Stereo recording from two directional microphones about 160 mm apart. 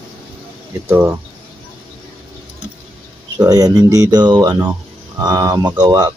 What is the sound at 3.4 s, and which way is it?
Speech, 25° right (ahead or behind).